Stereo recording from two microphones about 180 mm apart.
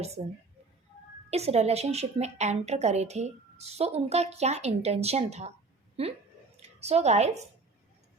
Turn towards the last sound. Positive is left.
turn(degrees=-40)  # may be behind; listen again after turning